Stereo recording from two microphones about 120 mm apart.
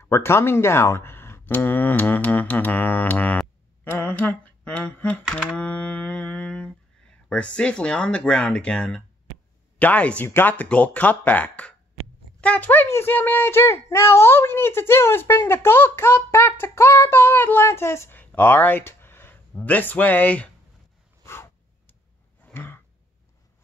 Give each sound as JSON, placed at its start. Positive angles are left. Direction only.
{"t": 0.0, "sound": "speech", "side_deg": 20}
{"t": 21.2, "sound": "a sound", "side_deg": 20}
{"t": 22.4, "sound": "throat clearing", "side_deg": 15}